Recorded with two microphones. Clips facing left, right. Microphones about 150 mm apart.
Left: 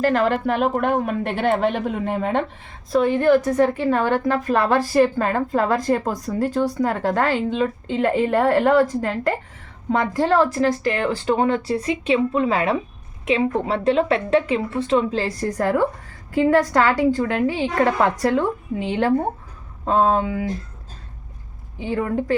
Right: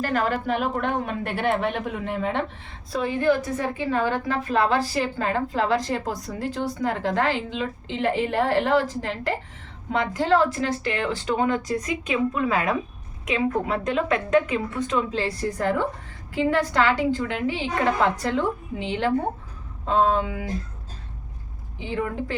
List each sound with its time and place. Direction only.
0.4 s a woman's voice: 50° left (ahead or behind)
2.1 s a woman's voice: 60° left (ahead or behind); by 20.2 s 45° left (ahead or behind)
21.8 s a woman's voice: 45° left (ahead or behind)